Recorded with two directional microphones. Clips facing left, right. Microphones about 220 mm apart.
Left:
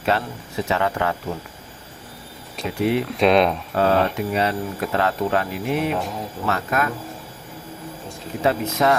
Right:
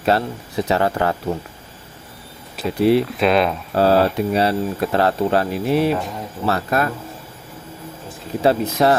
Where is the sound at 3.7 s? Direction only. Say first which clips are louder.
Right 4 dB; 35° right (ahead or behind).